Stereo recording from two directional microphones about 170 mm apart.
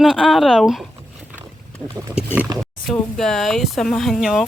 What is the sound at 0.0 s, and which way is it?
Speech, centre (ahead or behind).